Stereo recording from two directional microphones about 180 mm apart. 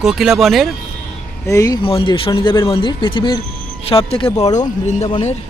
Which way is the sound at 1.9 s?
30° left (ahead or behind).